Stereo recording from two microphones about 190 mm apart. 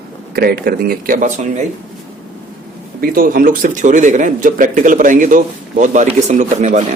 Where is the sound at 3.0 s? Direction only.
50° right (ahead or behind).